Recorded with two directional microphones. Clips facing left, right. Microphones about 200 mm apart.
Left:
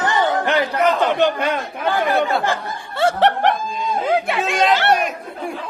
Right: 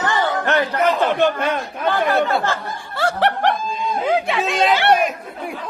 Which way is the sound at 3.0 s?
20° left (ahead or behind).